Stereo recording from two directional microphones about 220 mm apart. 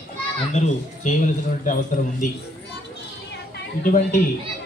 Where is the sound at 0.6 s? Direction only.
35° left (ahead or behind).